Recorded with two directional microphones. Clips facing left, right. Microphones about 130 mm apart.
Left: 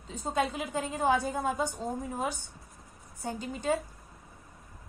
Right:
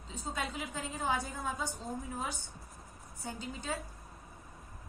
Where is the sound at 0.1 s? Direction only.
55° left (ahead or behind).